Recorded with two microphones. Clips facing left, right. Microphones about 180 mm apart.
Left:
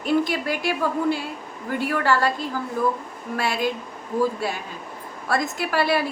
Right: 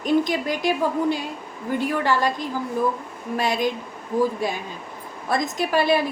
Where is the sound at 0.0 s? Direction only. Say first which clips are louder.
Right 1 dB; 20° right (ahead or behind).